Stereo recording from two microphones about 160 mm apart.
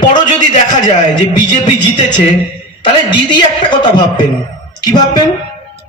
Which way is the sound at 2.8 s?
30° left (ahead or behind).